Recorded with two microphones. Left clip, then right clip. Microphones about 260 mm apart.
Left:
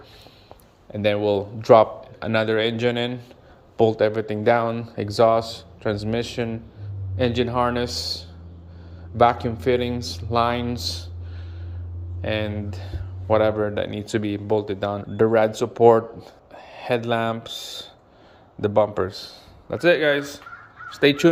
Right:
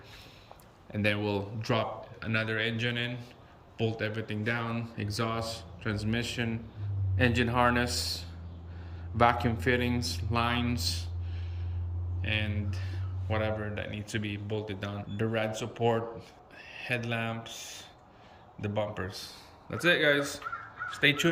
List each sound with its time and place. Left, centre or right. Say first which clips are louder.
0.9 s speech: left 10 dB; centre
12.2 s a man's voice: left 8 dB; centre
20.9 s a man's voice: left 8 dB; left